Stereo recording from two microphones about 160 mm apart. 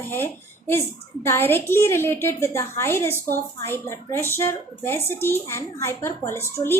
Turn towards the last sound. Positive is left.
turn(degrees=15)  # may be behind; listen again after turning